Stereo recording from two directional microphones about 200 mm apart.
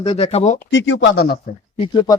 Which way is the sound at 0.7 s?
65° left (ahead or behind).